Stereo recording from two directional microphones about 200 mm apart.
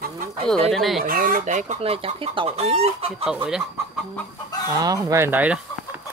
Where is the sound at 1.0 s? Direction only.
45° right (ahead or behind).